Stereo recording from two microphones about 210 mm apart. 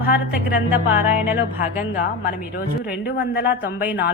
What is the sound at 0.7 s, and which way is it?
Music, 10° right (ahead or behind).